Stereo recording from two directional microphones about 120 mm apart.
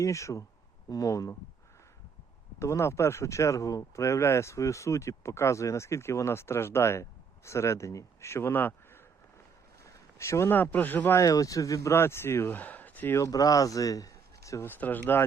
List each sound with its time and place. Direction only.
0.0 s speech: 25° left (ahead or behind)
2.6 s speech: 25° left (ahead or behind)
11.2 s speech: 30° left (ahead or behind)